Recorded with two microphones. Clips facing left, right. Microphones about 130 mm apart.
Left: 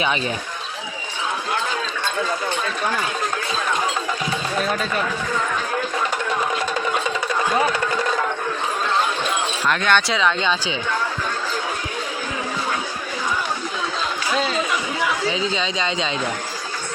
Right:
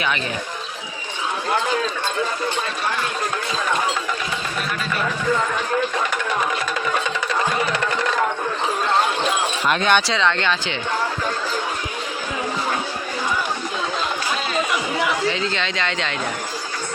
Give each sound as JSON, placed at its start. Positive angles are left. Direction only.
{"t": 9.6, "sound": "speech", "side_deg": -20}
{"t": 10.1, "sound": "speech", "side_deg": 5}
{"t": 15.3, "sound": "speech", "side_deg": 5}